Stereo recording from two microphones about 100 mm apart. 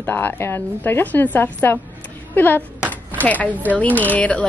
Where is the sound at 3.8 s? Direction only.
15° left (ahead or behind).